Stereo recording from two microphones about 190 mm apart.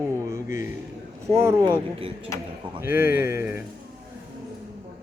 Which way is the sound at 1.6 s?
25° right (ahead or behind).